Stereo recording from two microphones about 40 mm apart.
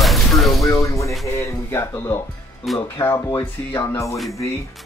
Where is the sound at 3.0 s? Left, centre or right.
Left.